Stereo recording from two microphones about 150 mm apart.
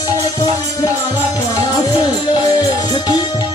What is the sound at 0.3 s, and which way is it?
Music, 25° left (ahead or behind).